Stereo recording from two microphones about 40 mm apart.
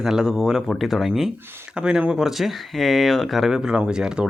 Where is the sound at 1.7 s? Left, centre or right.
Right.